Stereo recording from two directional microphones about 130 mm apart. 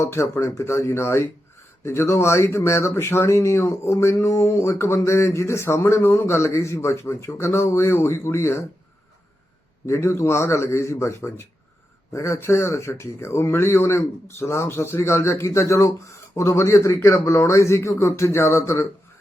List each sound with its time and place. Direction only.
0.0 s speech: 20° left (ahead or behind)
9.8 s speech: 20° left (ahead or behind)